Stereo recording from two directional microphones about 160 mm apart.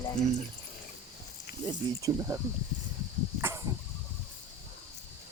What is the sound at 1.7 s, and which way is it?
Speech, 20° right (ahead or behind).